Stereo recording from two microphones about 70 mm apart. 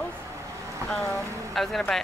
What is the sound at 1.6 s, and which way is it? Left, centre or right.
Speech, centre.